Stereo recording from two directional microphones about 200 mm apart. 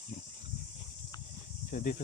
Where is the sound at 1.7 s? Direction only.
45° left (ahead or behind).